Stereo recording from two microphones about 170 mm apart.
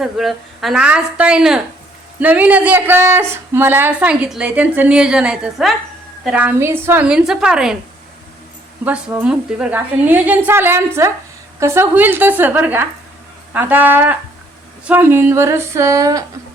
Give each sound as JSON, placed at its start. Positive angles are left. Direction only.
{"t": 0.0, "sound": "a woman's voice", "side_deg": 0}
{"t": 8.8, "sound": "speech", "side_deg": -10}